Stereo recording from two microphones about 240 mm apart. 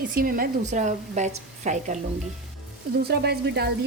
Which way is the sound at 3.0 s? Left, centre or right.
Right.